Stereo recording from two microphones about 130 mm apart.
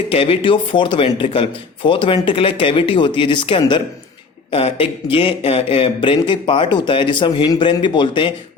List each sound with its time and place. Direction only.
0.1 s speech: 45° left (ahead or behind)
4.5 s speech: 50° left (ahead or behind)